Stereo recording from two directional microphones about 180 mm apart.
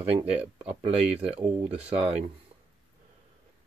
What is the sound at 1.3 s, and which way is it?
Speech, 30° right (ahead or behind).